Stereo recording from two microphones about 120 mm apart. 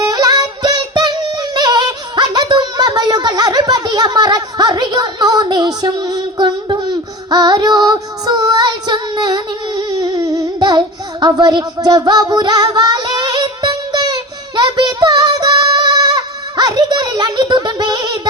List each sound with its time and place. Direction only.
0.0 s singing: 35° right (ahead or behind)
7.3 s female singing: 35° right (ahead or behind)